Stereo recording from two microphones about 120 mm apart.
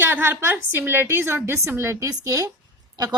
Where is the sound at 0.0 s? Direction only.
20° right (ahead or behind).